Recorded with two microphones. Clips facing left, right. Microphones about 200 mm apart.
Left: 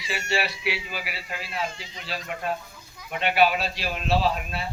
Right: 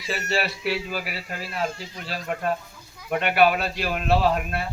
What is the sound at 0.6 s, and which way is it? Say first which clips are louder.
A man's voice: right 4 dB; 45° right (ahead or behind).